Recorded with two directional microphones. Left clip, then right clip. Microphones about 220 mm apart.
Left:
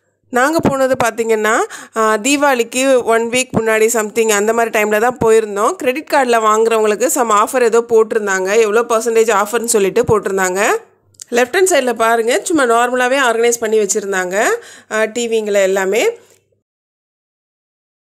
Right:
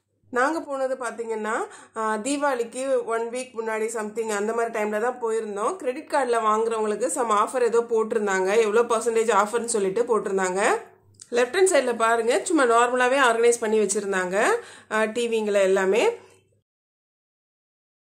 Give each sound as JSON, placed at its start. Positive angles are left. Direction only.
{"t": 0.3, "sound": "speech", "side_deg": 40}